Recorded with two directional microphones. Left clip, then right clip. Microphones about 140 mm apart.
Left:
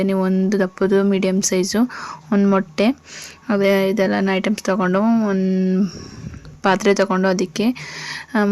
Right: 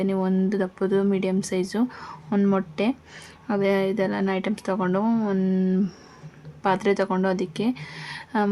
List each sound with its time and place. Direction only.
0.0 s speech: 25° left (ahead or behind)
5.0 s a sound: 15° left (ahead or behind)
6.6 s speech: 30° left (ahead or behind)